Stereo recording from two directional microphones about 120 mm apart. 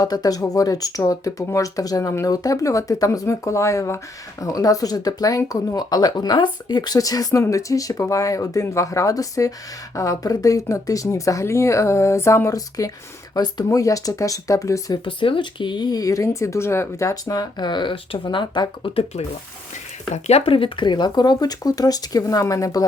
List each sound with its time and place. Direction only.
0.0 s speech: 30° left (ahead or behind)
15.0 s speech: 45° left (ahead or behind)
20.2 s speech: 55° left (ahead or behind); by 22.9 s 30° left (ahead or behind)